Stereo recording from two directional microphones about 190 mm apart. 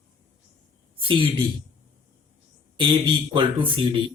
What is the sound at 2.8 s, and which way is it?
A man's voice, 25° right (ahead or behind).